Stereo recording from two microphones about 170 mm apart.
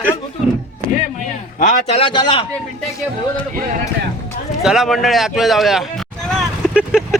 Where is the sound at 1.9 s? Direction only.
30° left (ahead or behind).